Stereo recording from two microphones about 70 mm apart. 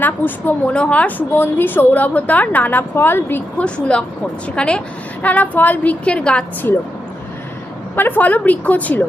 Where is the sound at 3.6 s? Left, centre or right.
Centre.